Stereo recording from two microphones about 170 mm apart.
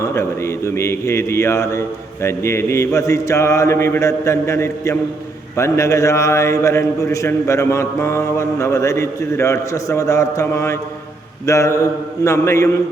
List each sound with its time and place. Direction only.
0.0 s a man's voice: 15° left (ahead or behind)